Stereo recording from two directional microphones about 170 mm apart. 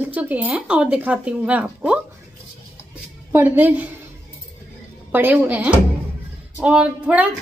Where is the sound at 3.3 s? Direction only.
15° right (ahead or behind).